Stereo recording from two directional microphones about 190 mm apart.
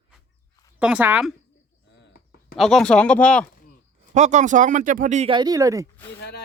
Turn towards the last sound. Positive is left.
turn(degrees=-15)  # may be behind; listen again after turning